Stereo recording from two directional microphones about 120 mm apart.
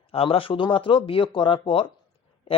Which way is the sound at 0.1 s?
50° left (ahead or behind).